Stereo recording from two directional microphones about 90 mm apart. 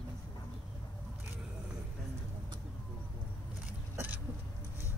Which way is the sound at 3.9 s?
20° right (ahead or behind).